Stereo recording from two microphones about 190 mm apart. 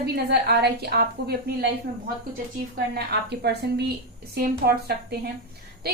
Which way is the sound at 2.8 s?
60° right (ahead or behind).